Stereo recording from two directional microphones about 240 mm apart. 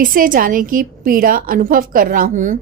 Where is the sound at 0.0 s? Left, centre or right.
Right.